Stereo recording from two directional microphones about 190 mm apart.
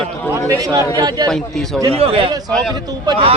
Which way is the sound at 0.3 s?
15° right (ahead or behind).